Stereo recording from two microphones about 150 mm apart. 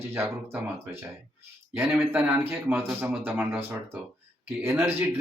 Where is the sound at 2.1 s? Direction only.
10° right (ahead or behind).